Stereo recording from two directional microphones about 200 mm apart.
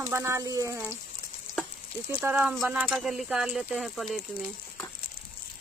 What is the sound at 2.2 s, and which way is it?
Speech, 5° right (ahead or behind).